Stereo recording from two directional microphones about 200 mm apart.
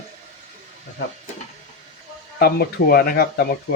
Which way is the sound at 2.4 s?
50° left (ahead or behind).